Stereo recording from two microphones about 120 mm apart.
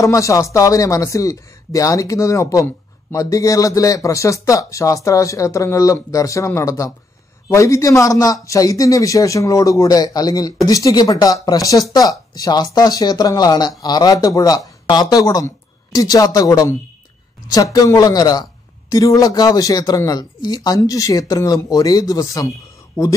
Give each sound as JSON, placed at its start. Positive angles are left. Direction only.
{"t": 0.0, "sound": "a woman's voice", "side_deg": 25}